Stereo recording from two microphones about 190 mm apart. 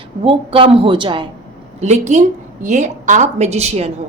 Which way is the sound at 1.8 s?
40° right (ahead or behind).